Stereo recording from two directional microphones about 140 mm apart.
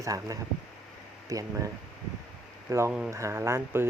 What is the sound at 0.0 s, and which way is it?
Speech, 25° right (ahead or behind).